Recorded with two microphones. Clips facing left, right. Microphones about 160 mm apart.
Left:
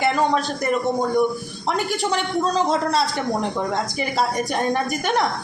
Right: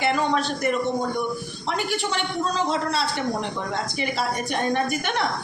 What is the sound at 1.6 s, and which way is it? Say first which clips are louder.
Speech: left 4 dB; 40° left (ahead or behind).